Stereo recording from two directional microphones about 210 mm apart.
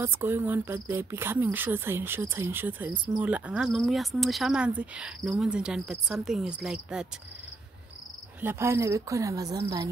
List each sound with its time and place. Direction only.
0.0 s speech: 10° right (ahead or behind)
8.4 s speech: 10° right (ahead or behind)